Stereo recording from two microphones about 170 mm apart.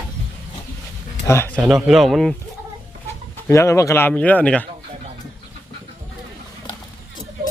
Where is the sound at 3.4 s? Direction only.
15° left (ahead or behind).